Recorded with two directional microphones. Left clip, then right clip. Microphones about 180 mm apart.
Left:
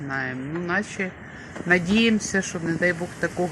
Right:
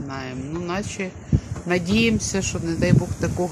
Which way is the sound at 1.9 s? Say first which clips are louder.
Even; 25° right (ahead or behind).